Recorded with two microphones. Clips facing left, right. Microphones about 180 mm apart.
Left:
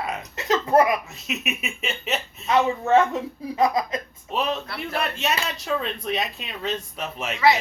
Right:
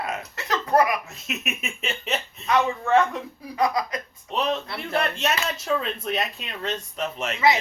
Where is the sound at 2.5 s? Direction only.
25° left (ahead or behind).